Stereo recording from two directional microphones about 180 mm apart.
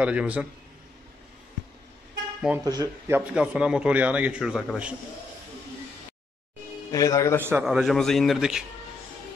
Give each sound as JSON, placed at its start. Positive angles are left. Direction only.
{"t": 0.0, "sound": "a man's voice", "side_deg": -5}
{"t": 2.6, "sound": "speech", "side_deg": -20}
{"t": 3.2, "sound": "a man's voice", "side_deg": -5}
{"t": 6.9, "sound": "a man's voice", "side_deg": 20}
{"t": 7.4, "sound": "a man's voice", "side_deg": -10}